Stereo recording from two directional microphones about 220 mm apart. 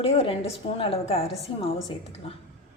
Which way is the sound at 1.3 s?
Centre (ahead or behind).